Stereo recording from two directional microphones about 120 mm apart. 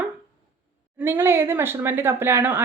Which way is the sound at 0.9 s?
20° right (ahead or behind).